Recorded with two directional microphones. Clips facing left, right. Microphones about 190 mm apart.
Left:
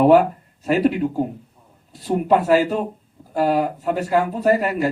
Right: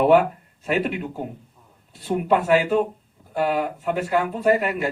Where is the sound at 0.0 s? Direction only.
40° left (ahead or behind).